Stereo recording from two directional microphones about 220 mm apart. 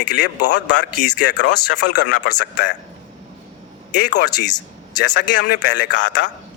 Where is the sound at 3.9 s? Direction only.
55° left (ahead or behind).